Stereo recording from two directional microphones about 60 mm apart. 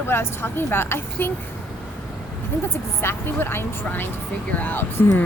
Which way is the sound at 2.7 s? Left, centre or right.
Left.